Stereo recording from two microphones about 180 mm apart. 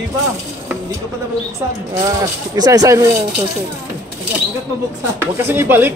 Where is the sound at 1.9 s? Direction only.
20° right (ahead or behind).